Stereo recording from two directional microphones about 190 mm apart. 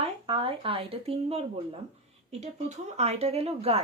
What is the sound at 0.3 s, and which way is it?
Speech, 30° right (ahead or behind).